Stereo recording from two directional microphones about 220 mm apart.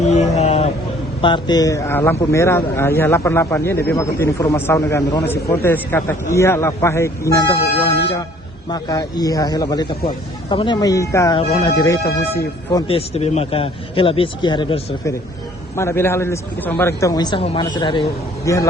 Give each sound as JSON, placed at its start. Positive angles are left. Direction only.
{"t": 0.0, "sound": "a sound", "side_deg": 30}
{"t": 1.2, "sound": "speech", "side_deg": 20}
{"t": 8.7, "sound": "speech", "side_deg": 15}
{"t": 12.9, "sound": "a man's voice", "side_deg": 25}
{"t": 15.7, "sound": "speech", "side_deg": 10}